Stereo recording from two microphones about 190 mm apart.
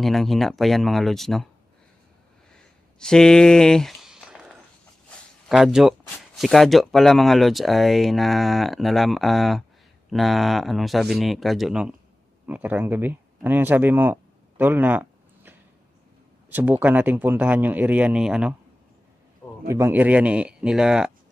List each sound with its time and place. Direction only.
0.0 s speech: centre (ahead or behind)
2.5 s a sound: 5° left (ahead or behind)
5.5 s speech: centre (ahead or behind)
19.7 s speech: 10° right (ahead or behind)